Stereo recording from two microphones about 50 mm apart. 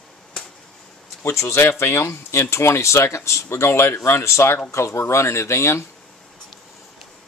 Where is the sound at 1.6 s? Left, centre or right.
Left.